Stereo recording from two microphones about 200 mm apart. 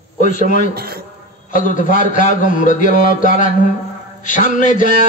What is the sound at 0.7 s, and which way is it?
Speech, 50° right (ahead or behind).